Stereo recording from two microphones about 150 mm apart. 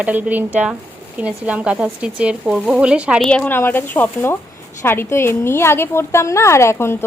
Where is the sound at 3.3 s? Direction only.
10° left (ahead or behind).